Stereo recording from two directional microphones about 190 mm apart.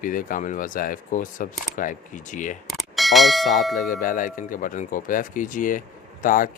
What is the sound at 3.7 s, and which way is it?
Speech, 45° left (ahead or behind).